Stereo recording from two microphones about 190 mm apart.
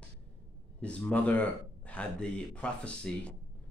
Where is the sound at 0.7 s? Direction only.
5° left (ahead or behind).